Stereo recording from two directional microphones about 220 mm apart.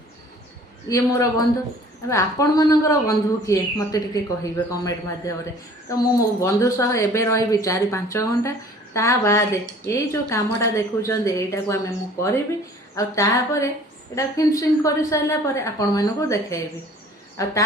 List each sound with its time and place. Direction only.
0.9 s speech: 15° left (ahead or behind)
13.0 s speech: 15° left (ahead or behind)